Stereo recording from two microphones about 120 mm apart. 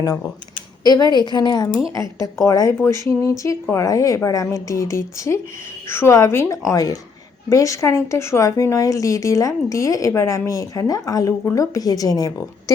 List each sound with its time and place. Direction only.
0.9 s a woman's voice: 35° left (ahead or behind)